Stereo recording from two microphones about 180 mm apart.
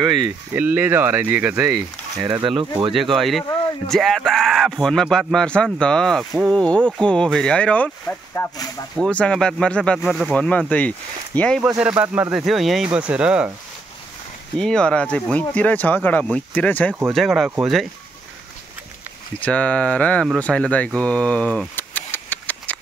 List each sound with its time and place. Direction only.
0.5 s speech: 10° right (ahead or behind)
2.2 s speech: 20° right (ahead or behind)
2.9 s speech: centre (ahead or behind)
11.8 s speech: 10° right (ahead or behind)
14.6 s speech: 5° left (ahead or behind)
19.4 s speech: 5° left (ahead or behind)